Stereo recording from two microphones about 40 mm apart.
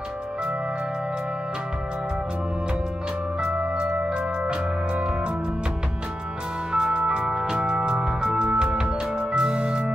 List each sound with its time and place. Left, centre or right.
3.7 s music: right
6.7 s music: right